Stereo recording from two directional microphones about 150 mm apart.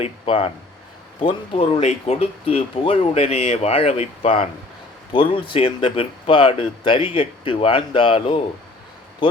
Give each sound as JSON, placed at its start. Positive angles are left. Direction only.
{"t": 0.0, "sound": "speech", "side_deg": 40}